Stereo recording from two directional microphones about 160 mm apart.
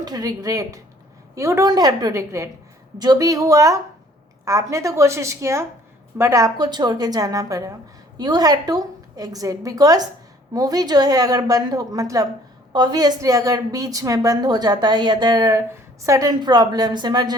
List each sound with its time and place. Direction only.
0.0 s a woman's voice: 25° right (ahead or behind)